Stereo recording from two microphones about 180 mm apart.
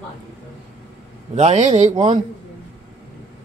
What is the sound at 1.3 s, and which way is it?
Speech, 40° right (ahead or behind).